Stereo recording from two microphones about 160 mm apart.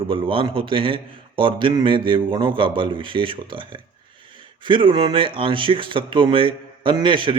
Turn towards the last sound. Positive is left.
turn(degrees=-30)  # may be behind; listen again after turning